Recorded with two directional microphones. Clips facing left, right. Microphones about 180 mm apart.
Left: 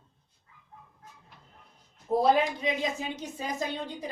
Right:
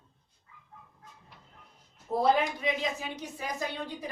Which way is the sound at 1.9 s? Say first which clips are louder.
Left 2 dB; 20° left (ahead or behind).